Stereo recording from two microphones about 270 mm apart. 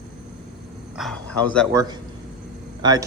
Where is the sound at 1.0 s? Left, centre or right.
Centre.